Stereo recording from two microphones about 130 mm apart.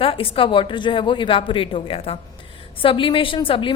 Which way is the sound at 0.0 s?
45° left (ahead or behind).